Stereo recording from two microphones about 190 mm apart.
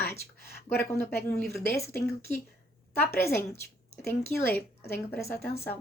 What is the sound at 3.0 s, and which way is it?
Speech, 10° left (ahead or behind).